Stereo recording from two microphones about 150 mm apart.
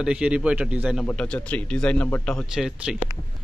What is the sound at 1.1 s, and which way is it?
Speech, 10° left (ahead or behind).